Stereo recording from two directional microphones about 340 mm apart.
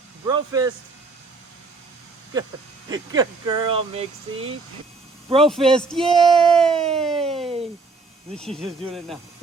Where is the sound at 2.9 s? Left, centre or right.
Centre.